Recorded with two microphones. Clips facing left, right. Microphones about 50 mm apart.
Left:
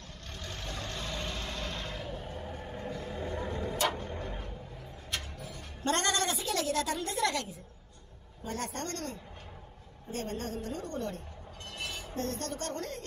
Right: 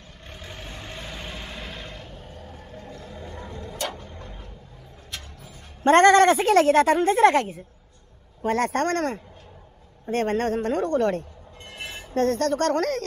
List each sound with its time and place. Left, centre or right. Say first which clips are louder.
0.3 s vehicle: right 2 dB; centre
3.8 s vehicle: even; centre
4.1 s tick-tock: left 3 dB; centre
5.9 s a woman's voice: right 16 dB; right
8.4 s a woman's voice: right 14 dB; right